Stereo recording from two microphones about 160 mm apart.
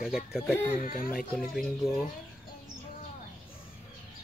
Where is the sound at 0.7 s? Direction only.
60° left (ahead or behind).